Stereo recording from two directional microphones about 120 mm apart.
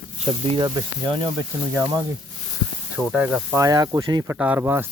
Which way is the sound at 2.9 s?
10° right (ahead or behind).